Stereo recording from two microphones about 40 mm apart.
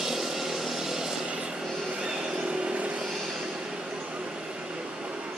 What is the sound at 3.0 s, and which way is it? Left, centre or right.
Vehicle, centre.